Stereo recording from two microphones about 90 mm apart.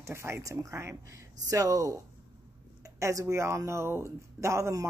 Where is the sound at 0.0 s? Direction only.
30° right (ahead or behind).